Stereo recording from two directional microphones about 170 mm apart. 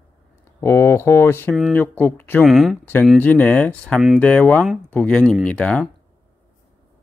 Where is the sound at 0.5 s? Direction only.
15° left (ahead or behind).